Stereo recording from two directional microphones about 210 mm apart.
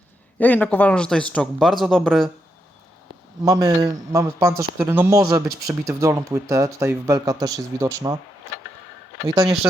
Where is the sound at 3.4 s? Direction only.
15° right (ahead or behind).